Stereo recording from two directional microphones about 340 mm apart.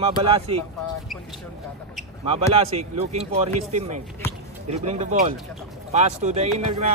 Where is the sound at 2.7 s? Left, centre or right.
Centre.